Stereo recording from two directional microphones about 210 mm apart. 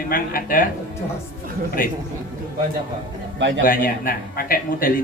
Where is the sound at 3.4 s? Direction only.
60° right (ahead or behind).